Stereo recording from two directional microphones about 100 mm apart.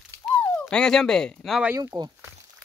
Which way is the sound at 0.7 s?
5° left (ahead or behind).